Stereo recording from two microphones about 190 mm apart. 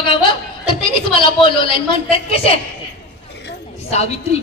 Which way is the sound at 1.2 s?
25° left (ahead or behind).